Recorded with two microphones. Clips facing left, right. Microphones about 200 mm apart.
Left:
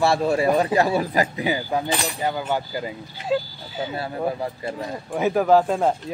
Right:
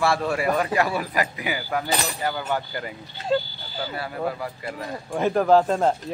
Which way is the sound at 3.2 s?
Centre (ahead or behind).